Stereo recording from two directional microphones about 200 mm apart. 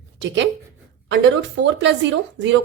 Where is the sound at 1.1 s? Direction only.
65° right (ahead or behind).